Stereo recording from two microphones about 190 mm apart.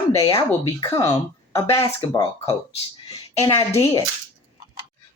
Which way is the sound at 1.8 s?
30° left (ahead or behind).